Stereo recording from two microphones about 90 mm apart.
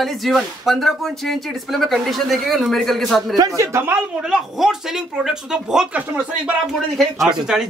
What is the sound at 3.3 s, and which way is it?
Speech, 40° right (ahead or behind).